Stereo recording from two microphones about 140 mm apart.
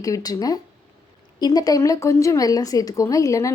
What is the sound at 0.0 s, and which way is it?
A woman's voice, 25° left (ahead or behind).